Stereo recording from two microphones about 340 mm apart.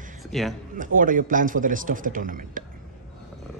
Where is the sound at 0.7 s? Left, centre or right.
Right.